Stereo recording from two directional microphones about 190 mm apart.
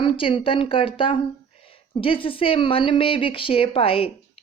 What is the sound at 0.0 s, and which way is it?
A woman's voice, 25° left (ahead or behind).